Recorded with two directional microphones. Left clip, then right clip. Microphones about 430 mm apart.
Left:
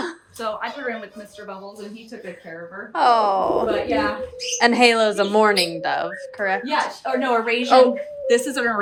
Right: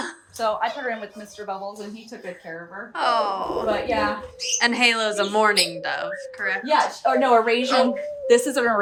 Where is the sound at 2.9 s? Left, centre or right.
Centre.